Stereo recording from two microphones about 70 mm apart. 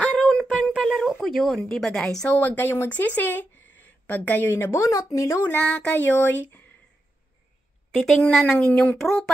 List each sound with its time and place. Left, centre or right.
0.3 s a sound: centre
1.2 s a woman's voice: centre
2.2 s speech: left
5.6 s speech: centre
8.0 s a woman's voice: centre